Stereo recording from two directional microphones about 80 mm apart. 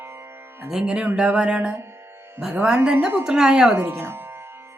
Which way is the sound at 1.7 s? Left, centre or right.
Right.